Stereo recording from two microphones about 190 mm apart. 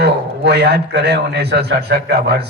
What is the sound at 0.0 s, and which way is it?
A man's voice, 60° right (ahead or behind).